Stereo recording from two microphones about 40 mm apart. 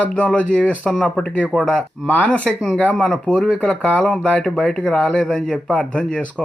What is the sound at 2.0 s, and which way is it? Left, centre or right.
Speech, centre.